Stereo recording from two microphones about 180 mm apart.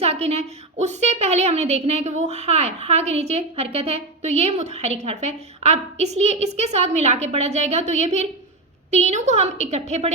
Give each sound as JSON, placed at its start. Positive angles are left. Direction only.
{"t": 0.0, "sound": "a woman's voice", "side_deg": -35}